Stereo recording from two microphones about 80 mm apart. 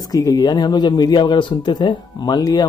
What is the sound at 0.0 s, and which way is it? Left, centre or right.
Speech, left.